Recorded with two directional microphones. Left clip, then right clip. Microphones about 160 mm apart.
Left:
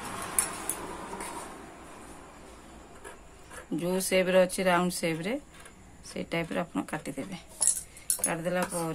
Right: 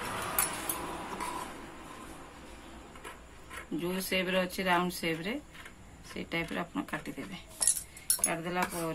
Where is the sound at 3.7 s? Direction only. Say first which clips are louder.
Left 6 dB; 90° left.